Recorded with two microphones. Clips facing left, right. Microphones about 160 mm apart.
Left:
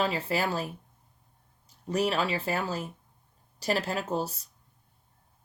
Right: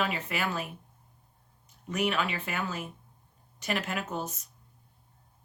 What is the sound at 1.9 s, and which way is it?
Speech, 35° left (ahead or behind).